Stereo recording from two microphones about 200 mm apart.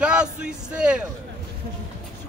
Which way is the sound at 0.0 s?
5° right (ahead or behind).